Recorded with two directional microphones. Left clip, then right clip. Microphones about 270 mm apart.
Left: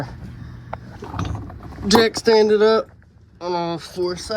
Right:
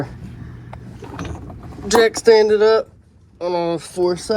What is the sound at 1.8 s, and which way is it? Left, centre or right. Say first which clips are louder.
Speech: right 3 dB; centre.